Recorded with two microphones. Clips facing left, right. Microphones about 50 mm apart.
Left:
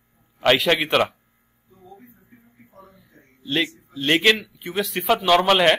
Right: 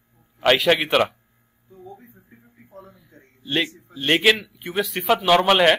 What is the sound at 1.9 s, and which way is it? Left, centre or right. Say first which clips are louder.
Music: right 2 dB; right.